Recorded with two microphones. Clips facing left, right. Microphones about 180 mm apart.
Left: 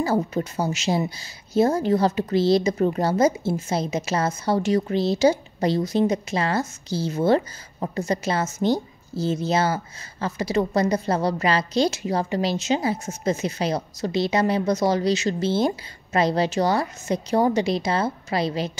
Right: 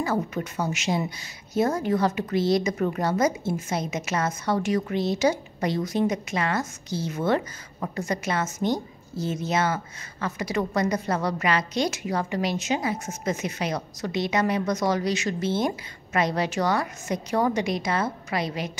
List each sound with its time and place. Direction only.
0.0 s a woman's voice: 30° left (ahead or behind)